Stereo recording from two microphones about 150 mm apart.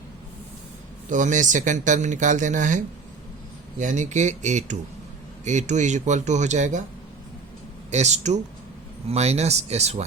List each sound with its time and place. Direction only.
1.1 s speech: 55° right (ahead or behind)
7.9 s speech: 50° right (ahead or behind)